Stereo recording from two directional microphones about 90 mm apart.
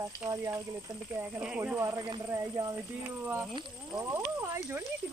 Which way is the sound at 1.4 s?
20° right (ahead or behind).